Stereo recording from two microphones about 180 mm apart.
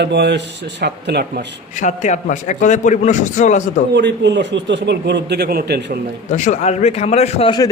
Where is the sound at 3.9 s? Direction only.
75° right (ahead or behind).